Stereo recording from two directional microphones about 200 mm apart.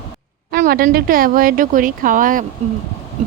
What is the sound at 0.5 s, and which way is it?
A woman's voice, 45° right (ahead or behind).